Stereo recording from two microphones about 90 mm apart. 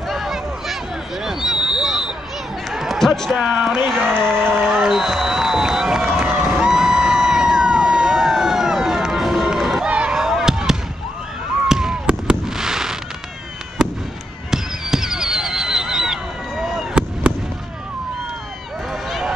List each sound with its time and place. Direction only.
0.1 s a sound: centre (ahead or behind)
3.3 s speech: 10° right (ahead or behind)
4.0 s speech: 25° right (ahead or behind)
4.6 s run: 10° right (ahead or behind)
9.8 s fireworks: 15° right (ahead or behind)
14.5 s fireworks: 5° right (ahead or behind)
19.0 s a sound: centre (ahead or behind)